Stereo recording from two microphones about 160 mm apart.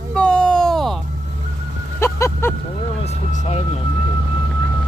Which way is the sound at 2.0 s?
15° left (ahead or behind).